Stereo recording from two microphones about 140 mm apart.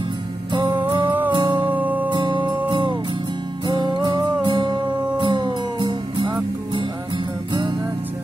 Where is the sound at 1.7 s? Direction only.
10° right (ahead or behind).